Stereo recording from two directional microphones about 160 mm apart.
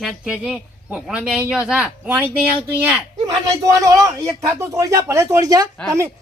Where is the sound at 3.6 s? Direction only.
20° right (ahead or behind).